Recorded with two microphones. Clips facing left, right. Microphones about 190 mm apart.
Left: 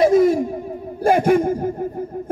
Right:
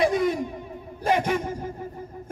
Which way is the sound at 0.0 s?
45° left (ahead or behind).